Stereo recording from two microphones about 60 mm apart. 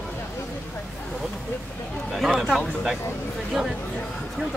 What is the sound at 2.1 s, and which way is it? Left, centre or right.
Speech, centre.